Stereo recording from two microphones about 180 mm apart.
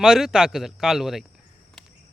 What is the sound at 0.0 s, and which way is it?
Speech, 5° right (ahead or behind).